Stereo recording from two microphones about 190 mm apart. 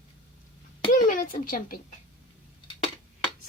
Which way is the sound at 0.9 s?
45° left (ahead or behind).